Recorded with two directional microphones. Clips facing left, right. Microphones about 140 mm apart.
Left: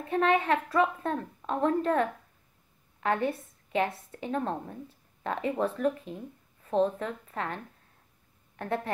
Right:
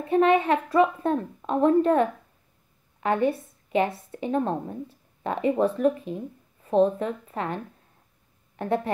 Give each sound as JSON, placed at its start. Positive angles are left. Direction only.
{"t": 0.0, "sound": "a woman's voice", "side_deg": -10}